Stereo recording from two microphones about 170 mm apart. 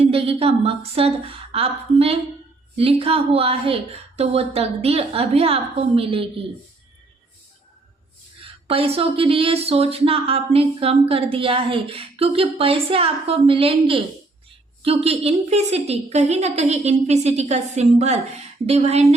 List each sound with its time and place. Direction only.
0.0 s speech: 35° right (ahead or behind)
8.6 s speech: 35° right (ahead or behind)